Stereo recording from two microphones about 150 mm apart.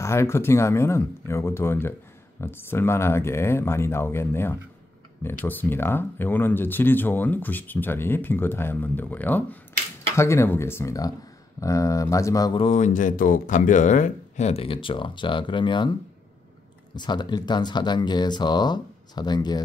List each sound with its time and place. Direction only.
0.0 s speech: 20° left (ahead or behind)
12.5 s speech: 45° left (ahead or behind)
16.9 s speech: 30° left (ahead or behind)